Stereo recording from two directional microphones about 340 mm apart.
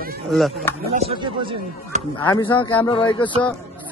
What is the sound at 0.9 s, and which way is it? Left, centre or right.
Speech, centre.